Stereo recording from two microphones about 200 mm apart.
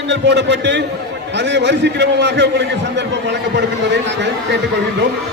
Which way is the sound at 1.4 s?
60° right (ahead or behind).